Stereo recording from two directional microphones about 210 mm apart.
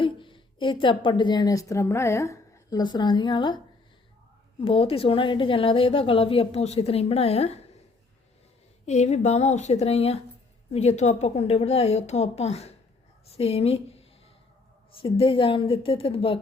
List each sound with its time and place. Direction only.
0.0 s a woman's voice: 25° left (ahead or behind)
4.6 s a woman's voice: 25° left (ahead or behind)
8.9 s a woman's voice: 35° left (ahead or behind)
15.0 s a woman's voice: 25° left (ahead or behind)